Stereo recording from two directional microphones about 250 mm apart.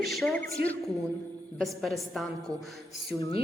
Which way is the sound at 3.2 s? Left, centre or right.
Left.